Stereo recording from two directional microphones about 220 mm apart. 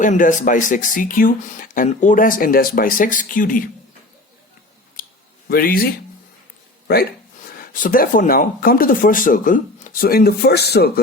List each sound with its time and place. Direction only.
0.0 s speech: 35° left (ahead or behind)
5.0 s a sound: 40° left (ahead or behind)
5.5 s speech: 40° left (ahead or behind)